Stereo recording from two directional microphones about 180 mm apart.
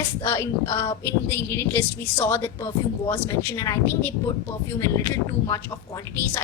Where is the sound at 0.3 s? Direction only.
15° left (ahead or behind).